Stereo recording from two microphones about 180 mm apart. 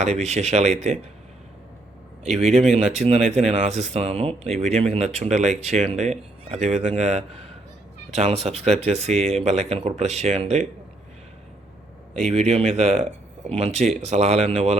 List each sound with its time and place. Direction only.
0.0 s speech: 40° right (ahead or behind)
2.7 s speech: 35° right (ahead or behind)
4.4 s speech: centre (ahead or behind)
4.7 s speech: 35° right (ahead or behind)
12.2 s speech: 35° right (ahead or behind)